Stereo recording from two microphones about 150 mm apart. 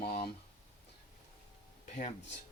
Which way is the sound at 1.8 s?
50° left (ahead or behind).